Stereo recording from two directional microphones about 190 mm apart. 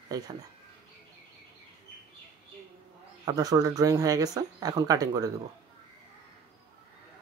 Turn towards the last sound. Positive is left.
turn(degrees=-20)  # may be behind; listen again after turning